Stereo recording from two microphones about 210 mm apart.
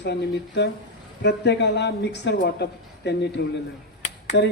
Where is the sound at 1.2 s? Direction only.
55° left (ahead or behind).